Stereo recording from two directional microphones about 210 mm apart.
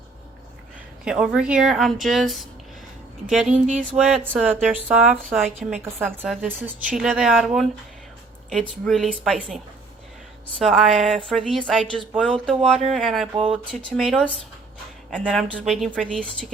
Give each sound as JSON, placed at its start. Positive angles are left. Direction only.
{"t": 1.0, "sound": "speech", "side_deg": -5}
{"t": 8.8, "sound": "speech", "side_deg": 0}
{"t": 10.6, "sound": "speech", "side_deg": 0}